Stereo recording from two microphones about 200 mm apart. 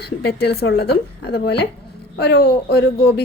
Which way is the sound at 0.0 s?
55° left (ahead or behind).